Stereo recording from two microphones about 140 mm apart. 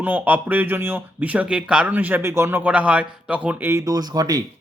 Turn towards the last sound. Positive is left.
turn(degrees=-25)  # may be behind; listen again after turning